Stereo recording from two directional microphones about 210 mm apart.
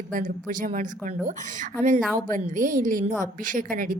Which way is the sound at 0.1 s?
40° right (ahead or behind).